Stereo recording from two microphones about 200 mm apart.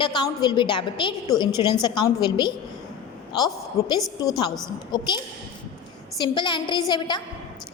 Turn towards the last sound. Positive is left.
turn(degrees=20)  # may be behind; listen again after turning